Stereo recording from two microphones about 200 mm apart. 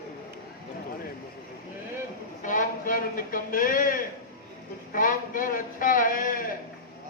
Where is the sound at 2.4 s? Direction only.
40° left (ahead or behind).